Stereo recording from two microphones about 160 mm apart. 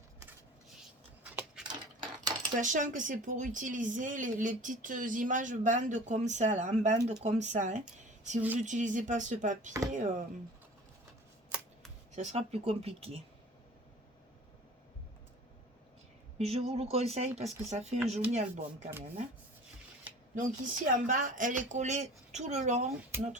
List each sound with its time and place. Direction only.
1.2 s a sound: 10° right (ahead or behind)
1.6 s a sound: 30° right (ahead or behind)
2.6 s speech: 50° right (ahead or behind)
12.1 s speech: 45° right (ahead or behind)
16.4 s speech: 40° right (ahead or behind)
20.3 s speech: 55° right (ahead or behind)